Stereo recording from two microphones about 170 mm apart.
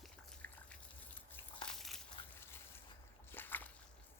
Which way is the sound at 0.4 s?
15° left (ahead or behind).